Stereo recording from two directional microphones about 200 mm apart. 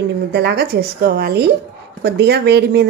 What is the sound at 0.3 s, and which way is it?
Speech, 55° right (ahead or behind).